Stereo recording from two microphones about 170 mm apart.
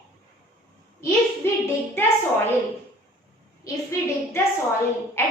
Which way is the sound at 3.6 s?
15° left (ahead or behind).